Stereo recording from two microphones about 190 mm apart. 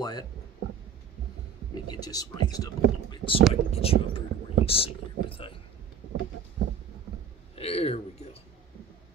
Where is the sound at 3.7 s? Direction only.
30° left (ahead or behind).